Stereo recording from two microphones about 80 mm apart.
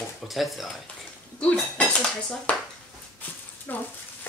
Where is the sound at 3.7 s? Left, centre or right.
Left.